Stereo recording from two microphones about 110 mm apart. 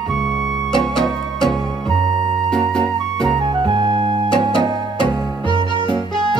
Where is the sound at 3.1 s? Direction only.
35° right (ahead or behind).